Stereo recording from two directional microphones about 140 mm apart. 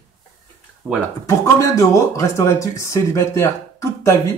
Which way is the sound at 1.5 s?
20° left (ahead or behind).